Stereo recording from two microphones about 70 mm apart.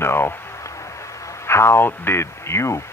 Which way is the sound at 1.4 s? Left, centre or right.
Left.